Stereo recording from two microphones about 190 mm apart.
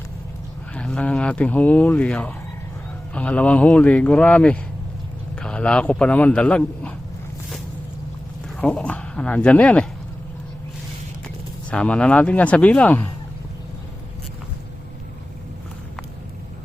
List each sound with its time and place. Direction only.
0.7 s speech: 5° left (ahead or behind)
8.6 s speech: 5° left (ahead or behind)
11.7 s speech: 5° left (ahead or behind)